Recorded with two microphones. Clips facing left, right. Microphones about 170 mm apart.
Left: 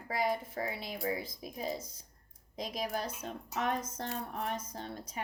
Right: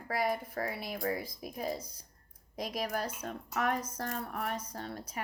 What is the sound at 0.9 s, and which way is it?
Speech, 50° right (ahead or behind).